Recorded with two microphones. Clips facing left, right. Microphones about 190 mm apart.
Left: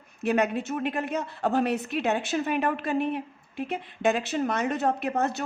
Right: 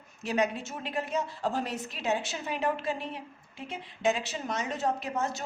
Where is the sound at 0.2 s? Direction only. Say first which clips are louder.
Left 4 dB; 60° left (ahead or behind).